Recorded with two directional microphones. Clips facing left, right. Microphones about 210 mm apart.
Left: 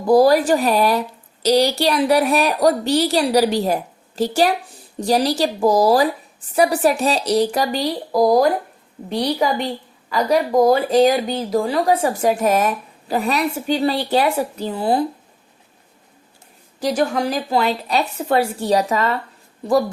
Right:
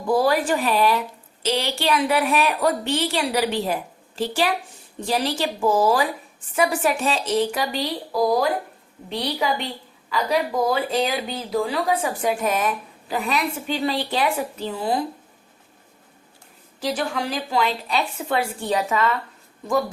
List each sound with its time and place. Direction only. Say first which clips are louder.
0.0 s speech: left 7 dB; 40° left (ahead or behind)
16.8 s speech: left 6 dB; 45° left (ahead or behind)